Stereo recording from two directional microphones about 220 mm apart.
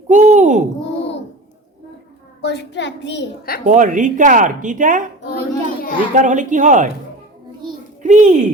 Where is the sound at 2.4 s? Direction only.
50° left (ahead or behind).